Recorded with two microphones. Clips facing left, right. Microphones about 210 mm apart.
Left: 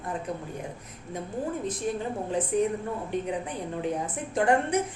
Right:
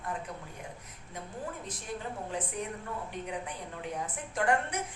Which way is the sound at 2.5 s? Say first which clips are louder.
Left 11 dB; 25° left (ahead or behind).